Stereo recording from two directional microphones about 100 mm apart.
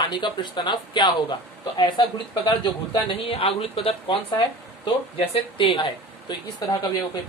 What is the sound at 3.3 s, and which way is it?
Speech, 75° left (ahead or behind).